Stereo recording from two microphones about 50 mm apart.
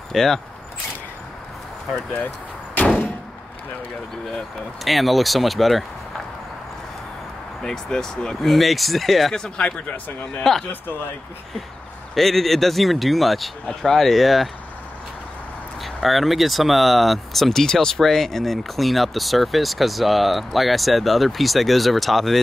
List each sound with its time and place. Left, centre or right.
0.1 s speech: centre
4.3 s speech: centre
7.6 s speech: centre
9.3 s speech: centre
10.4 s speech: centre
12.2 s speech: centre
15.8 s speech: centre